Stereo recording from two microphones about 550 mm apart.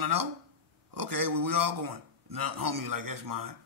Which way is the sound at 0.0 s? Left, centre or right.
Right.